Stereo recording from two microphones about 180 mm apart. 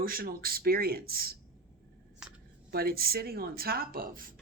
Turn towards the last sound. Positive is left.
turn(degrees=-50)  # may be behind; listen again after turning